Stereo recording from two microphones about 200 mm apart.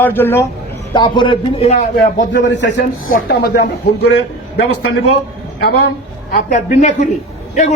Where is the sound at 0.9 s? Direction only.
25° left (ahead or behind).